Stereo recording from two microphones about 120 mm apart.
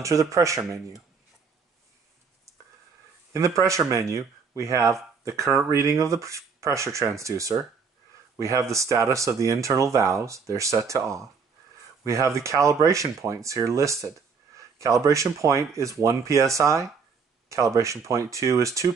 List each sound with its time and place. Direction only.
0.0 s speech: 25° right (ahead or behind)
3.3 s speech: 25° right (ahead or behind)